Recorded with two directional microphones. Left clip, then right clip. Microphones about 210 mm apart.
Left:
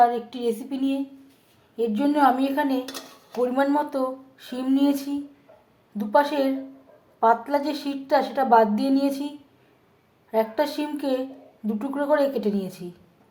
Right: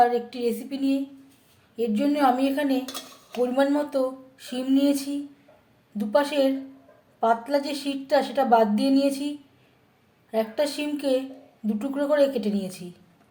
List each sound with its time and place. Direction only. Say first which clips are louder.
0.0 s a woman's voice: left 1 dB; centre (ahead or behind)
10.3 s a woman's voice: left 2 dB; centre (ahead or behind)